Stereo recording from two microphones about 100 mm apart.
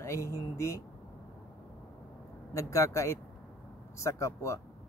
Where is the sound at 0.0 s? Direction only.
30° left (ahead or behind).